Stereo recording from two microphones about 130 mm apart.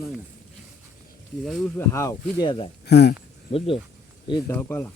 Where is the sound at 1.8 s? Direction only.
20° left (ahead or behind).